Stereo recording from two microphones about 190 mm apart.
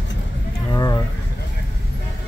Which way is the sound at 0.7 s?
20° left (ahead or behind).